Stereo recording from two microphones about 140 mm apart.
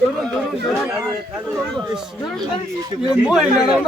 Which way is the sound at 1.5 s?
5° left (ahead or behind).